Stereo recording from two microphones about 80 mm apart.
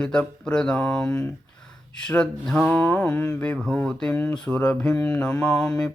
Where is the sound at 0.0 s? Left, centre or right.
Centre.